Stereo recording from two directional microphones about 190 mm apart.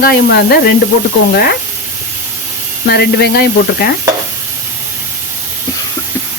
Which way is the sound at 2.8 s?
55° left (ahead or behind).